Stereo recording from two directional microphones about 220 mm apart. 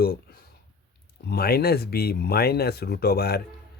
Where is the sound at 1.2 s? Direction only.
45° left (ahead or behind).